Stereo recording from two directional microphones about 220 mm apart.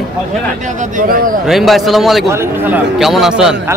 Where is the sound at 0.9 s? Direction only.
40° right (ahead or behind).